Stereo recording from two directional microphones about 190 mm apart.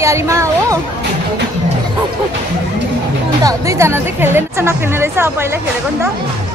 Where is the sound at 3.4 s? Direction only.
15° right (ahead or behind).